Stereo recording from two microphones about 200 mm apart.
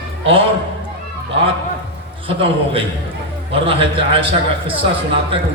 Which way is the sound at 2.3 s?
25° right (ahead or behind).